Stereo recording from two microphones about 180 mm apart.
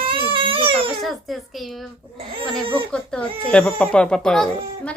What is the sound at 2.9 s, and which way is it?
Speech, 5° left (ahead or behind).